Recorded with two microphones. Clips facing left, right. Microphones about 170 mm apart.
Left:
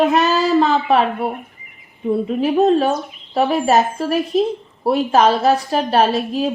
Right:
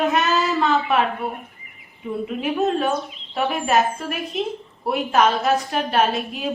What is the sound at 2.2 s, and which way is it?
A woman's voice, 35° left (ahead or behind).